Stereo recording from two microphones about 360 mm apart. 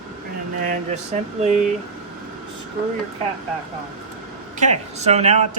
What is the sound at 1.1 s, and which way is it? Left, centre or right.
Speech, centre.